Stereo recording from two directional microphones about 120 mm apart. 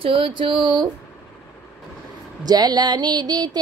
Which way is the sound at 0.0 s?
45° right (ahead or behind).